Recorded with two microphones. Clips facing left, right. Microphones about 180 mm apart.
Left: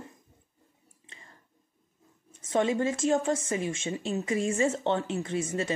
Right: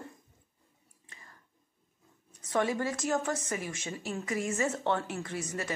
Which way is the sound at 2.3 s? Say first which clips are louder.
Left 3 dB; 25° left (ahead or behind).